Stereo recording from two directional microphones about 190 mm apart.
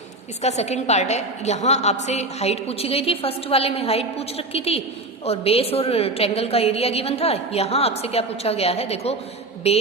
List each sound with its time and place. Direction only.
0.4 s a woman's voice: 35° left (ahead or behind)